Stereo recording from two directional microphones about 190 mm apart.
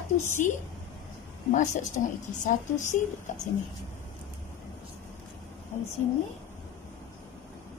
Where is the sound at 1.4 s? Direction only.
40° left (ahead or behind).